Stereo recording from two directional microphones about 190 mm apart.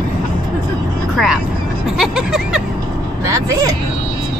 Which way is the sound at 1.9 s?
5° right (ahead or behind).